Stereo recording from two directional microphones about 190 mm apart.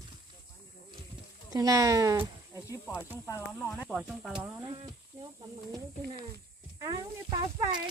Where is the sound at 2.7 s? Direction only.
15° left (ahead or behind).